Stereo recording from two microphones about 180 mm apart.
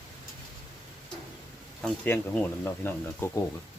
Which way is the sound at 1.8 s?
10° left (ahead or behind).